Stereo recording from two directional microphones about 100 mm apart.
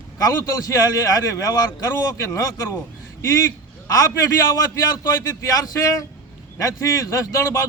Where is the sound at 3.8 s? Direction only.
35° left (ahead or behind).